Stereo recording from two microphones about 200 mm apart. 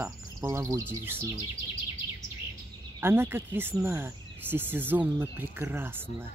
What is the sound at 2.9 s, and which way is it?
Speech, 10° right (ahead or behind).